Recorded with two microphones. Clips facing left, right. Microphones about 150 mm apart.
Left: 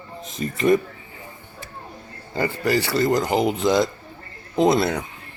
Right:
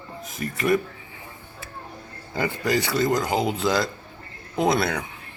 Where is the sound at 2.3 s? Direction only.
15° right (ahead or behind).